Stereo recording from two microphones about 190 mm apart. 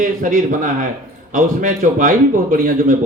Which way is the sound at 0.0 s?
45° right (ahead or behind).